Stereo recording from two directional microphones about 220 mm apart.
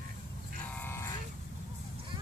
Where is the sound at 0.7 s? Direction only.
10° left (ahead or behind).